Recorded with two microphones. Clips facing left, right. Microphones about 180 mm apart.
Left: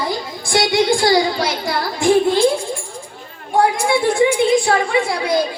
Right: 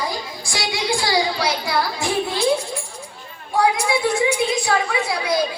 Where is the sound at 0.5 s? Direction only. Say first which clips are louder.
Left 8 dB; 50° left (ahead or behind).